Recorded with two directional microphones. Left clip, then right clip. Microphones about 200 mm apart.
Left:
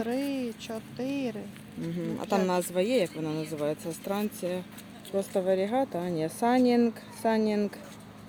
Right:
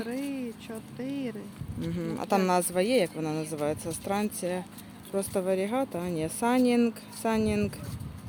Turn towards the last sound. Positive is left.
turn(degrees=0)  # may be behind; listen again after turning